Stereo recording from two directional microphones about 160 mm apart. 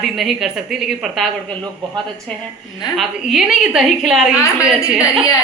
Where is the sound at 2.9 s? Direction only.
Centre (ahead or behind).